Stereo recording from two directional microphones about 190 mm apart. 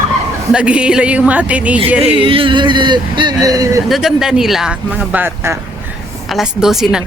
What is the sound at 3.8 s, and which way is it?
Speech, centre (ahead or behind).